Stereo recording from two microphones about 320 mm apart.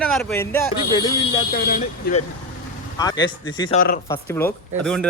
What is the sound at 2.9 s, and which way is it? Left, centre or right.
A man's voice, centre.